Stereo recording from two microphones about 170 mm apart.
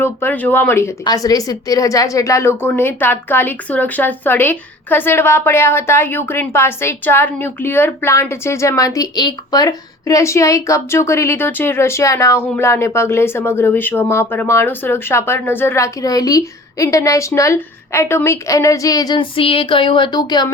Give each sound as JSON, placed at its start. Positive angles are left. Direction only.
{"t": 0.0, "sound": "a woman's voice", "side_deg": 10}